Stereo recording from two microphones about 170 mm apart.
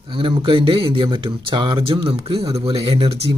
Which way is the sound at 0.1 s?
30° right (ahead or behind).